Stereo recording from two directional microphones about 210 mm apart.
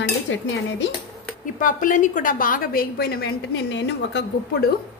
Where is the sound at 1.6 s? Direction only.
40° left (ahead or behind); by 4.2 s 60° left (ahead or behind).